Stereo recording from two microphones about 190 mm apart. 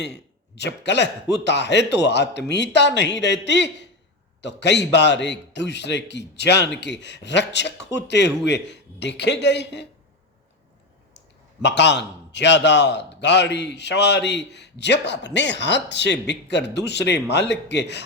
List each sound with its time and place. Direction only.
0.0 s a man's voice: 65° left (ahead or behind)
11.6 s a man's voice: 65° left (ahead or behind)